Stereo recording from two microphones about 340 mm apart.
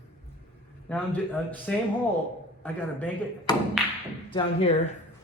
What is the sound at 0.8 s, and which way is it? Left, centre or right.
A man's voice, centre.